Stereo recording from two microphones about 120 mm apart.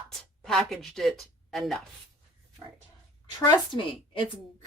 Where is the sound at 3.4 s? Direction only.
45° left (ahead or behind).